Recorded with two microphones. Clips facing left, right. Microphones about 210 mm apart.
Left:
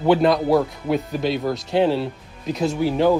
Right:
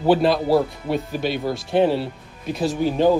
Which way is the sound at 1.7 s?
15° right (ahead or behind).